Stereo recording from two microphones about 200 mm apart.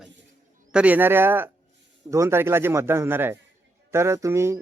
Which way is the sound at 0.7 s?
5° right (ahead or behind).